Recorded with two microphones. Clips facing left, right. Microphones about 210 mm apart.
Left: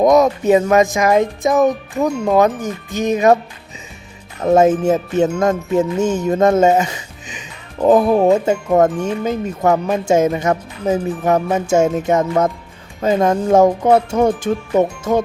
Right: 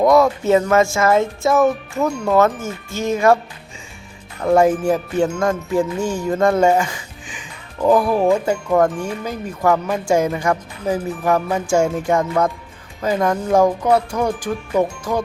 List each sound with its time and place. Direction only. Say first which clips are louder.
0.0 s speech: left 2 dB; 20° left (ahead or behind)
4.4 s music: left 2 dB; 20° left (ahead or behind)